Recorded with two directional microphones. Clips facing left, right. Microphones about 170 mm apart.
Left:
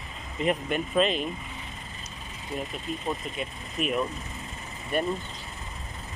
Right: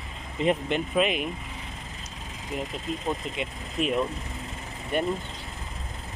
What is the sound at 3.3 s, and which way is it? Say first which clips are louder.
Speech: right 2 dB; 25° right (ahead or behind).